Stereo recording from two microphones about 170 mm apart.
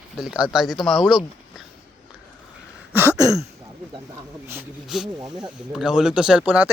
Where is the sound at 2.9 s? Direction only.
15° right (ahead or behind).